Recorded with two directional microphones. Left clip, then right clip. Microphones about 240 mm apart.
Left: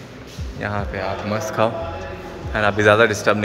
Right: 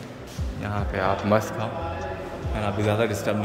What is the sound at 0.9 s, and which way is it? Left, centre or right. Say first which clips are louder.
Speech: right 7 dB; centre.